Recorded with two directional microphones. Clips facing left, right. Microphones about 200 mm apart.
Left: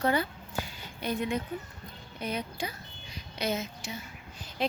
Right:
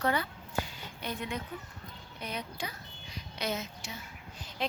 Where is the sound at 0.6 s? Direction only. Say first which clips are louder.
Left 4 dB; 10° left (ahead or behind).